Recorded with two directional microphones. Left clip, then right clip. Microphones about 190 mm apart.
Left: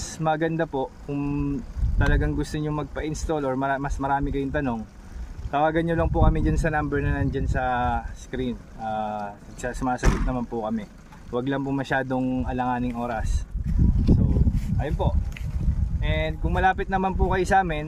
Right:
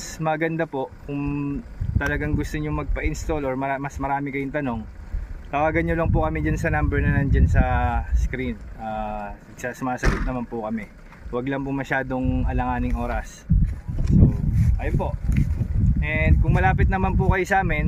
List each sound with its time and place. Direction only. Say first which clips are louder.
0.2 s speech: even; 5° right (ahead or behind)
10.0 s speech: right 2 dB; 40° left (ahead or behind)
10.2 s speech: even; 5° right (ahead or behind)
14.8 s speech: left 1 dB; centre (ahead or behind)